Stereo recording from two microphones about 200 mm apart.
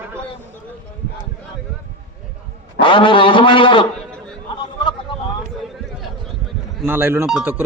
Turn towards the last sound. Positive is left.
turn(degrees=-5)  # may be behind; listen again after turning